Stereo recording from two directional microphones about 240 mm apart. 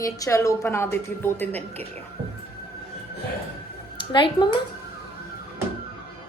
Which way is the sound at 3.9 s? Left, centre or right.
Centre.